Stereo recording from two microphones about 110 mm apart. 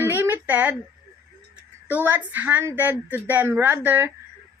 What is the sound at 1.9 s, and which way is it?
A woman's voice, 15° right (ahead or behind).